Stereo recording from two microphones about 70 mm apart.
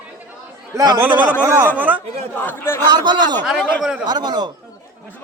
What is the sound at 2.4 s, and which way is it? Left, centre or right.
Speech, left.